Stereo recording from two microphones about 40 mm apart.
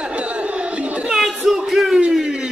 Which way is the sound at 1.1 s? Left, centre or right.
Centre.